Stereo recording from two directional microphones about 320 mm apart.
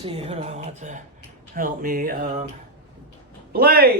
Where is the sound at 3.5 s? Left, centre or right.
Right.